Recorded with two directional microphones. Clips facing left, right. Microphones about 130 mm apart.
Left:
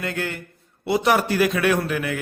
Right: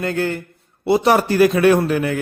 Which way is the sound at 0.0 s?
35° right (ahead or behind).